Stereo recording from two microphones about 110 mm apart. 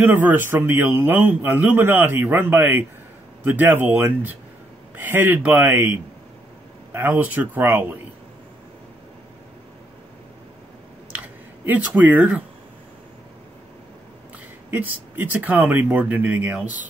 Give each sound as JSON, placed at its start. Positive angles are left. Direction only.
{"t": 0.0, "sound": "a man's voice", "side_deg": -15}
{"t": 12.0, "sound": "a man's voice", "side_deg": -15}
{"t": 14.7, "sound": "a man's voice", "side_deg": -15}